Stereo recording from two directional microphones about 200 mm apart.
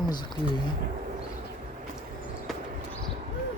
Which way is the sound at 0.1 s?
20° left (ahead or behind).